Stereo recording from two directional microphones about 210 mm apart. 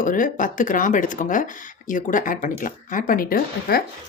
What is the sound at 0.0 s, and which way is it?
Speech, 40° left (ahead or behind).